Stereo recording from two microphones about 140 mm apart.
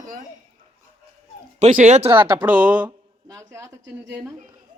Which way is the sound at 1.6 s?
55° right (ahead or behind).